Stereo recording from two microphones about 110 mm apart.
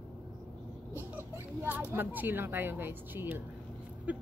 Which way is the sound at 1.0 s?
20° right (ahead or behind).